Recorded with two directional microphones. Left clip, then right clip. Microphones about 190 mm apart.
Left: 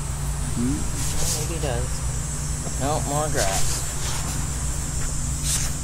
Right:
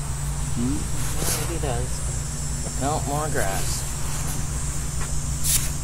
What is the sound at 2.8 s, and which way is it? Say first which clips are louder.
Speech: even; 35° right (ahead or behind).